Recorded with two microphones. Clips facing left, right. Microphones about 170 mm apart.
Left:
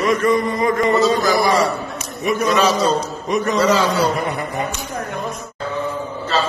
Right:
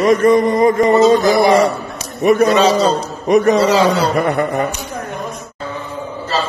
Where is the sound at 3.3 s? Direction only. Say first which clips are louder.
Right 6 dB; 65° right (ahead or behind).